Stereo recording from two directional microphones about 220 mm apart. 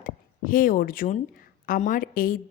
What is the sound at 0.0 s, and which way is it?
A woman's voice, 40° left (ahead or behind).